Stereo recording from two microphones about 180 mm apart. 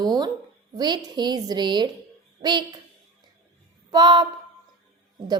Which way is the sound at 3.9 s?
25° right (ahead or behind).